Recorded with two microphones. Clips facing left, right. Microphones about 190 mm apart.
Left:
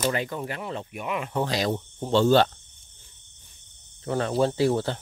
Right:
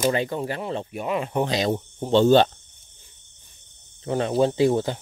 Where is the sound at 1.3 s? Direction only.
20° right (ahead or behind).